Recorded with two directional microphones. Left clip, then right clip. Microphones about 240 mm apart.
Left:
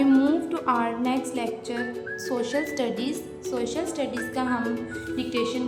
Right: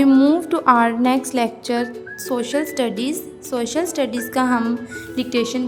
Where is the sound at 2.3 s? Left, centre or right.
Centre.